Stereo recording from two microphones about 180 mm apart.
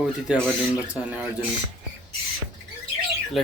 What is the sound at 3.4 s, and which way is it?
Speech, centre (ahead or behind).